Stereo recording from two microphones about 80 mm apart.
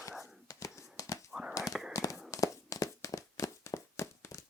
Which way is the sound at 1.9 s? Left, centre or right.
Left.